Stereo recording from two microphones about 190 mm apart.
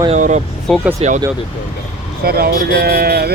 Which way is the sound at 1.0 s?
40° right (ahead or behind).